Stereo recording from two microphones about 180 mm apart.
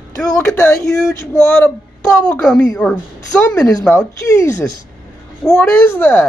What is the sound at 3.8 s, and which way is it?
Speech, 15° left (ahead or behind).